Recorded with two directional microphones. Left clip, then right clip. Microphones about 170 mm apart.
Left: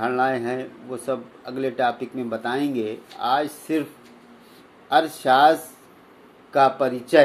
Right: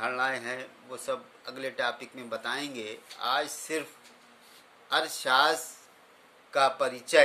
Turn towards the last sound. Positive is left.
turn(degrees=-15)  # may be behind; listen again after turning